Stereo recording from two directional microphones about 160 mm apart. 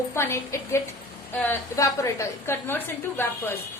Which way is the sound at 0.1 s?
15° left (ahead or behind).